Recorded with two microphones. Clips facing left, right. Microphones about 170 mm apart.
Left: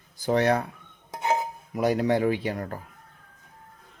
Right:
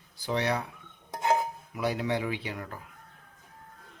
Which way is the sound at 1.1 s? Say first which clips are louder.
Even; 5° left (ahead or behind).